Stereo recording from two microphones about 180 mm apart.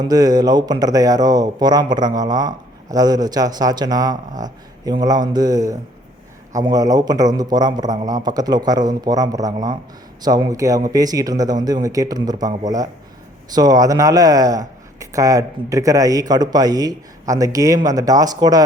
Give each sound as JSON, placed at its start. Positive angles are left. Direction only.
{"t": 0.0, "sound": "speech", "side_deg": -20}